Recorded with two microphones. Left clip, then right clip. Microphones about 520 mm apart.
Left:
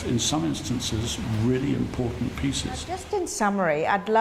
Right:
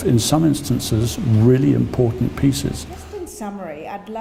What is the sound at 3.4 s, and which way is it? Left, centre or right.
Speech, left.